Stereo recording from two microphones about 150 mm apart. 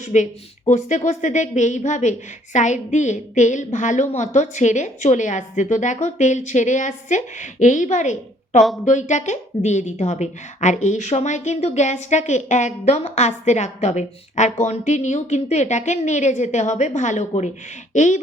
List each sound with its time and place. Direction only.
0.1 s a woman's voice: 50° left (ahead or behind)